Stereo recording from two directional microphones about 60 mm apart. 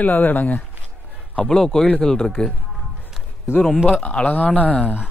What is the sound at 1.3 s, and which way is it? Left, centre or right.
A man's voice, centre.